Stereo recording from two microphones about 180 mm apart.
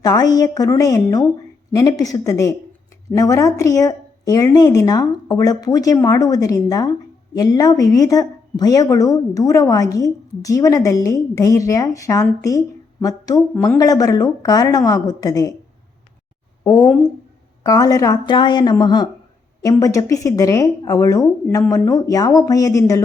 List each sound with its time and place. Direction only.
0.0 s speech: 20° left (ahead or behind)
16.6 s speech: 15° left (ahead or behind)